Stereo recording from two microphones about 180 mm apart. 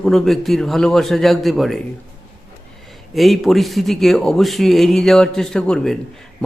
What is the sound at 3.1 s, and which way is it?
Speech, centre (ahead or behind).